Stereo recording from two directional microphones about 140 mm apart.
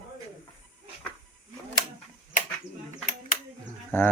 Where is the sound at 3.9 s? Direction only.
15° left (ahead or behind).